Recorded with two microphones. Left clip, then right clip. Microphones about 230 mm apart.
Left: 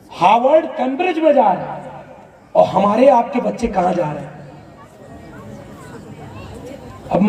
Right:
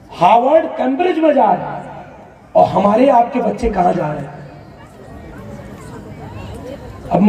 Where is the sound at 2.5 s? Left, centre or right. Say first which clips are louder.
Right 2 dB; left.